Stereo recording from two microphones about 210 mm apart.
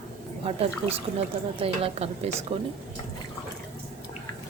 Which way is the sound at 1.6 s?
30° right (ahead or behind).